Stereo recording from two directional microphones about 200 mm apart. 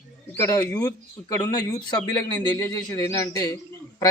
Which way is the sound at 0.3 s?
15° left (ahead or behind).